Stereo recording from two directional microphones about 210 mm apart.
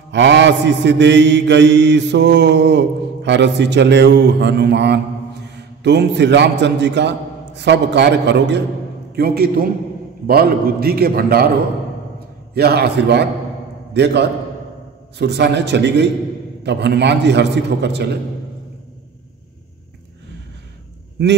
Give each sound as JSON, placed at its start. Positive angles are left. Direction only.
{"t": 0.1, "sound": "mantra", "side_deg": -60}
{"t": 9.1, "sound": "a man's voice", "side_deg": -45}
{"t": 12.5, "sound": "a man's voice", "side_deg": -50}
{"t": 16.6, "sound": "mantra", "side_deg": -55}